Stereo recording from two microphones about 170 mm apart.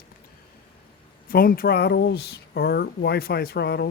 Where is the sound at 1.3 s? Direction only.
60° left (ahead or behind).